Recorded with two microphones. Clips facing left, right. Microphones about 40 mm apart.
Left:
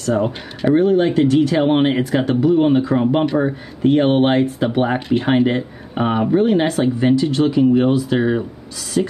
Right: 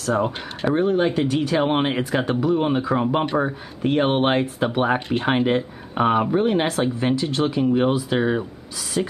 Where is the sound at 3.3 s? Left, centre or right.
Centre.